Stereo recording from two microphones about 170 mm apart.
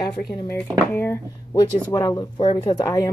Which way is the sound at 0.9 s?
15° left (ahead or behind).